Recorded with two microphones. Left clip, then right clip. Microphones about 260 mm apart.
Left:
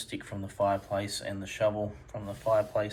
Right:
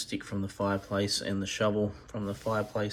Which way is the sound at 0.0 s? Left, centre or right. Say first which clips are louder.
Right 3 dB; centre.